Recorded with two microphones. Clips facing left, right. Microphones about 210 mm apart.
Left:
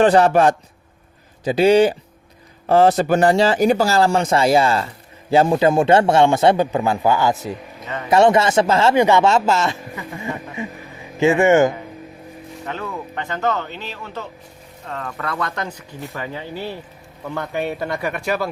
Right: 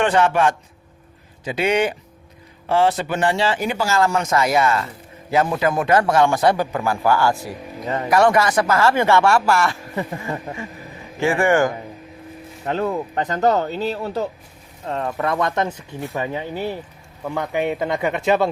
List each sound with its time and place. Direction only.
0.0 s a man's voice: 35° left (ahead or behind); by 9.7 s 20° left (ahead or behind)
11.2 s a man's voice: 20° left (ahead or behind)
12.6 s speech: 35° right (ahead or behind)